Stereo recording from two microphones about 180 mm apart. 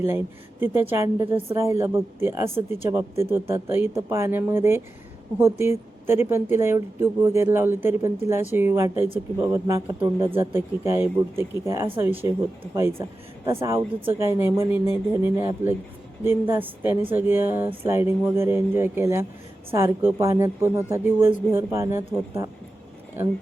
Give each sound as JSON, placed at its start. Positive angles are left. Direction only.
{"t": 0.0, "sound": "a woman's voice", "side_deg": -15}